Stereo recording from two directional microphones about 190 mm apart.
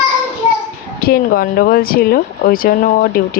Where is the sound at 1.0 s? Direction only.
50° left (ahead or behind).